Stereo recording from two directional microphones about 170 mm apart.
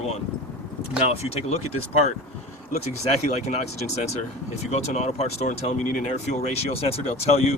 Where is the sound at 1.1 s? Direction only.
40° left (ahead or behind).